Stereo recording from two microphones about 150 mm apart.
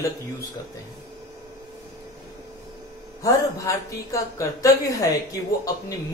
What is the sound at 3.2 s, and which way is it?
Speech, 20° left (ahead or behind).